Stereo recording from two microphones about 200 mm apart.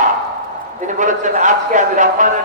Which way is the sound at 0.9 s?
40° right (ahead or behind).